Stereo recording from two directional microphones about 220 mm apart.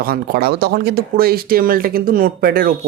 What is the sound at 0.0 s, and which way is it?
Speech, 45° right (ahead or behind).